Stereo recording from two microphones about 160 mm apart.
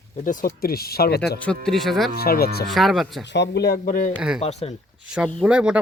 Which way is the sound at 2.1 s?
75° left (ahead or behind).